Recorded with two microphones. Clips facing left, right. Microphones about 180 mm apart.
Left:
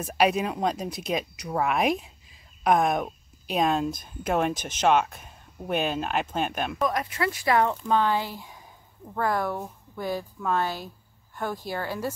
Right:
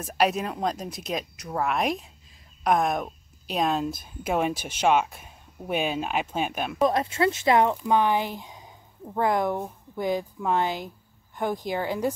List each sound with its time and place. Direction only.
0.0 s speech: centre (ahead or behind)
6.9 s speech: 25° right (ahead or behind)